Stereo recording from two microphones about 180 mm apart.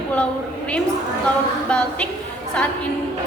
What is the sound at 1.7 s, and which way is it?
Speech, 5° left (ahead or behind).